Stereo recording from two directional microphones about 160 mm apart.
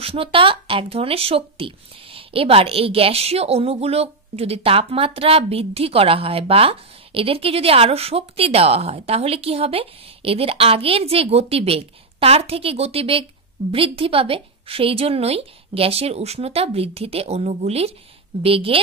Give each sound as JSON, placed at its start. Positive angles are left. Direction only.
{"t": 0.0, "sound": "speech", "side_deg": -35}